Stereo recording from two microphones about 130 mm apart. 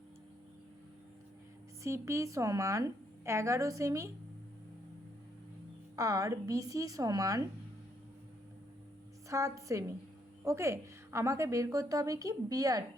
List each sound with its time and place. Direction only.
1.8 s a woman's voice: 20° right (ahead or behind)
6.0 s a woman's voice: 25° right (ahead or behind)
9.3 s a woman's voice: 25° right (ahead or behind)